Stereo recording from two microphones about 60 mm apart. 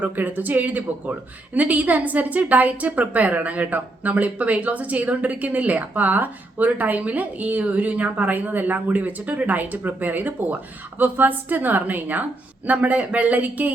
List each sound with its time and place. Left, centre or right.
0.0 s a woman's voice: right